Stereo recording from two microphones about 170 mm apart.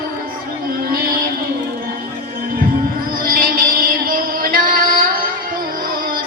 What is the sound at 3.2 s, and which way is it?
Music, 55° right (ahead or behind).